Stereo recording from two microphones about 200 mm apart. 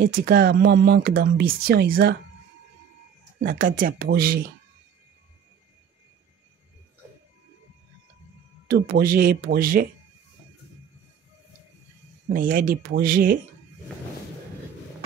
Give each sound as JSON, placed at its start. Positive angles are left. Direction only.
{"t": 0.0, "sound": "speech", "side_deg": -45}
{"t": 3.3, "sound": "speech", "side_deg": -45}
{"t": 8.6, "sound": "speech", "side_deg": -45}
{"t": 12.3, "sound": "speech", "side_deg": -45}